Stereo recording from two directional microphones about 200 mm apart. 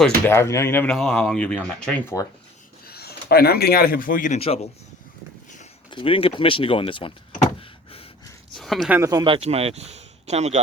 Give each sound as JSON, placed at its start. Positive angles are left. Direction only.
{"t": 0.3, "sound": "speech", "side_deg": 15}
{"t": 2.8, "sound": "speech", "side_deg": 50}
{"t": 5.9, "sound": "speech", "side_deg": 25}
{"t": 7.6, "sound": "a sound", "side_deg": 30}
{"t": 8.5, "sound": "zipper", "side_deg": 0}
{"t": 9.0, "sound": "speech", "side_deg": -15}